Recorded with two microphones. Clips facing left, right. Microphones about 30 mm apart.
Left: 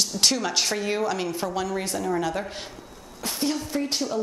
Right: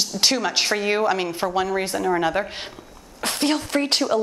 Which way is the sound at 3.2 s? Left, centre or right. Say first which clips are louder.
Right 5 dB; right.